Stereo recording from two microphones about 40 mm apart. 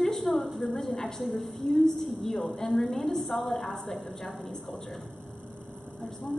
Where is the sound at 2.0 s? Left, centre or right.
Centre.